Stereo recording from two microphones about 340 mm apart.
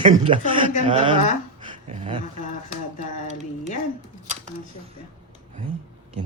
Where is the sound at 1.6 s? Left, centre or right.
Centre.